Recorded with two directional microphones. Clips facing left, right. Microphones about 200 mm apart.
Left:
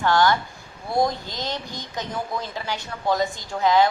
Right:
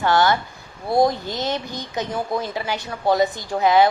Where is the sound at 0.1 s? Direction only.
20° right (ahead or behind).